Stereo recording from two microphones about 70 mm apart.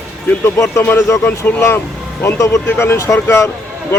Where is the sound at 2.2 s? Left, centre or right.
Left.